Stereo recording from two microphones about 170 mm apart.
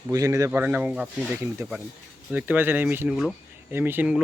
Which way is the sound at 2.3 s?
10° right (ahead or behind).